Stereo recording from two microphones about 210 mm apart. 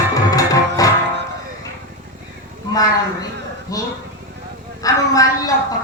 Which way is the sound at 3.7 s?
15° left (ahead or behind).